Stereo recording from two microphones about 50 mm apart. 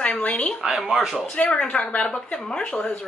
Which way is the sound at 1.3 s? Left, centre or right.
Left.